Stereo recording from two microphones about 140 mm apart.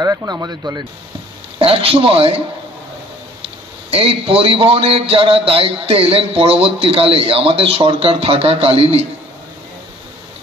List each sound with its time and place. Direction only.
0.0 s speech: 25° right (ahead or behind)
1.6 s speech: 45° right (ahead or behind)
3.9 s speech: 40° right (ahead or behind)